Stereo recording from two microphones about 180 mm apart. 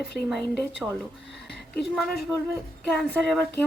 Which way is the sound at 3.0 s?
Centre (ahead or behind).